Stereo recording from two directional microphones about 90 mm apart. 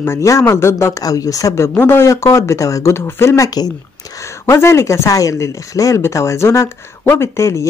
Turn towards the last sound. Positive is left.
turn(degrees=30)  # may be behind; listen again after turning